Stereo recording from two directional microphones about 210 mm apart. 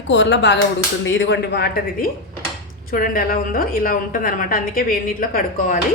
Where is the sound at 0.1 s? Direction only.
60° left (ahead or behind); by 5.8 s 40° left (ahead or behind).